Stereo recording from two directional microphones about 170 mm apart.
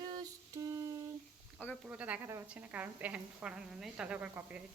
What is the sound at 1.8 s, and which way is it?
A woman's voice, 10° right (ahead or behind).